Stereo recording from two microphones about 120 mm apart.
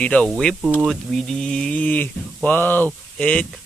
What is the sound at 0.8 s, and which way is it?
Speech, centre (ahead or behind).